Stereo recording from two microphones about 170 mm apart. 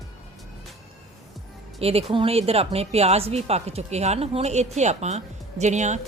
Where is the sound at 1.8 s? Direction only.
35° right (ahead or behind).